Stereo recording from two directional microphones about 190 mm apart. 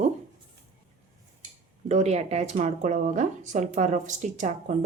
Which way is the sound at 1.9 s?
35° right (ahead or behind).